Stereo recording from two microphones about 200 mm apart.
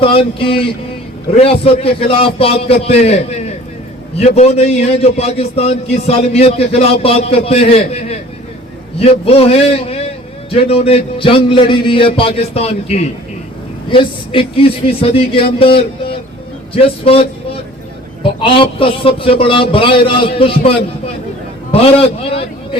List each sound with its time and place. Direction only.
0.0 s a man's voice: 25° left (ahead or behind)